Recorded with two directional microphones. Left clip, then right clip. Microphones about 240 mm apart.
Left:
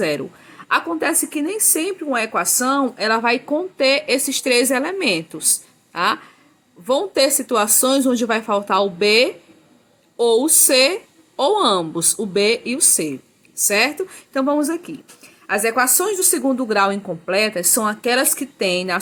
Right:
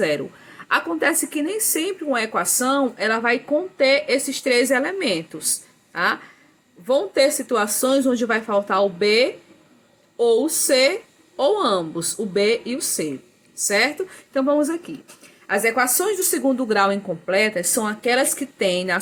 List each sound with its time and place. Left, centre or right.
0.0 s a woman's voice: centre